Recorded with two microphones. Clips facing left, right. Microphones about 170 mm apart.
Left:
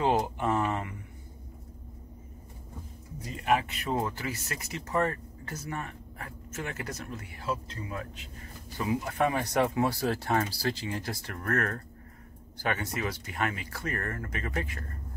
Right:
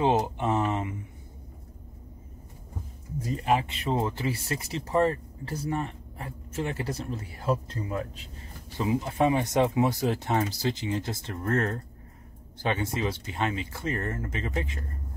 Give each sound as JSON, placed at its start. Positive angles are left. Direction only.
{"t": 0.0, "sound": "a sound", "side_deg": -20}
{"t": 3.2, "sound": "music", "side_deg": -40}
{"t": 3.4, "sound": "speech", "side_deg": -30}